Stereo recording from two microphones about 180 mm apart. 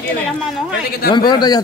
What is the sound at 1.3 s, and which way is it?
Speech, 25° left (ahead or behind).